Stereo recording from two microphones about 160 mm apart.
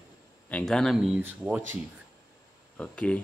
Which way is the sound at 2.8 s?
5° left (ahead or behind).